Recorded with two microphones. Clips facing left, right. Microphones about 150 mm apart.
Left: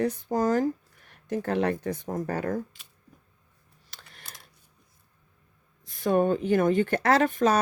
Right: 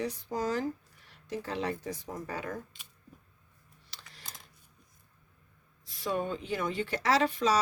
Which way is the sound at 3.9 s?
55° left (ahead or behind).